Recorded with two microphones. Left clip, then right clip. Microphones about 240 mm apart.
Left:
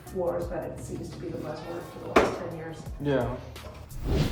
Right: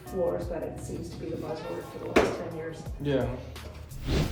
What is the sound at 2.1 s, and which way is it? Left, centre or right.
A woman's voice, centre.